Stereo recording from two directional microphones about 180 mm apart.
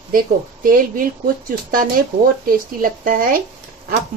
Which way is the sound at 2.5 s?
50° right (ahead or behind).